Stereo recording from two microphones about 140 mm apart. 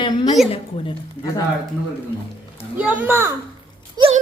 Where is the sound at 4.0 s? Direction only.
30° right (ahead or behind).